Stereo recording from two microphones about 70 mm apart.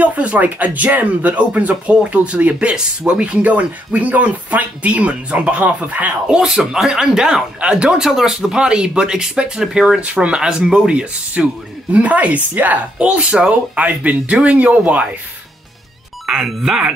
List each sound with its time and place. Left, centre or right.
0.0 s speech: right
6.2 s speech: centre
16.3 s speech: centre